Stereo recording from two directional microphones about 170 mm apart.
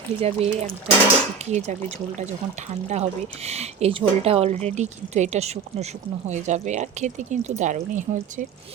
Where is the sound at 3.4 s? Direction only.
40° right (ahead or behind).